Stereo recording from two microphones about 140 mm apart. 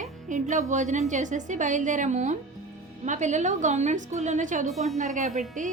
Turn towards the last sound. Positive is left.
turn(degrees=-60)  # may be behind; listen again after turning